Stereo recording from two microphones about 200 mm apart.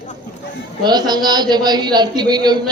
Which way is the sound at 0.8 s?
20° right (ahead or behind).